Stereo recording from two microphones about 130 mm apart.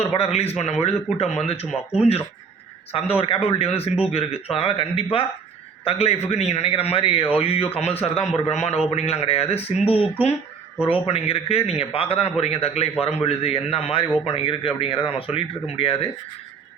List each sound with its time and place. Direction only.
0.0 s a man's voice: 50° left (ahead or behind)